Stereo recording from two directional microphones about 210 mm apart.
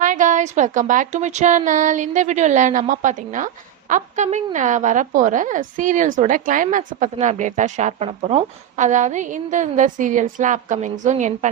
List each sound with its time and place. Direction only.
0.0 s a woman's voice: 35° right (ahead or behind)